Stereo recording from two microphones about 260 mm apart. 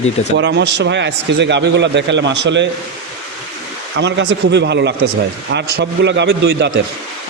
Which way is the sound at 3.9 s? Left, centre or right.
Right.